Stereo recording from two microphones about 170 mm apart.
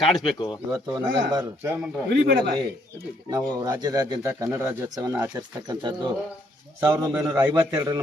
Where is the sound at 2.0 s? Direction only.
70° right (ahead or behind).